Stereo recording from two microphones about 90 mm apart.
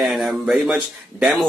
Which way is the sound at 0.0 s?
Centre (ahead or behind).